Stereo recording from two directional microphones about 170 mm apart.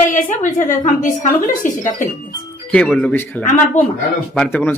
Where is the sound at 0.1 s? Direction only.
50° left (ahead or behind).